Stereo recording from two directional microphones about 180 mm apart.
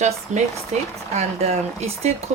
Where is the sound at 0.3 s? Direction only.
45° right (ahead or behind).